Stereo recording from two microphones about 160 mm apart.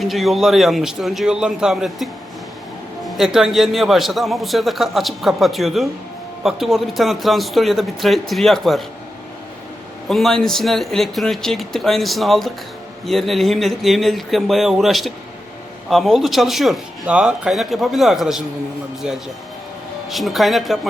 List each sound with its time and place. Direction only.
0.0 s a man's voice: centre (ahead or behind)
10.1 s a man's voice: centre (ahead or behind)
20.1 s a man's voice: centre (ahead or behind)